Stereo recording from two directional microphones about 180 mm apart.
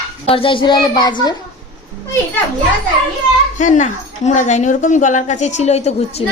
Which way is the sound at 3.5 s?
45° left (ahead or behind).